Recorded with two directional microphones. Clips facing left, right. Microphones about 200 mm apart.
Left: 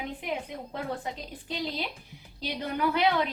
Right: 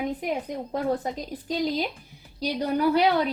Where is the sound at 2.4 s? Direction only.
40° right (ahead or behind).